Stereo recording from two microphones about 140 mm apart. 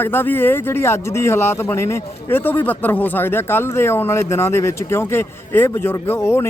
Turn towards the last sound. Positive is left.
turn(degrees=20)  # may be behind; listen again after turning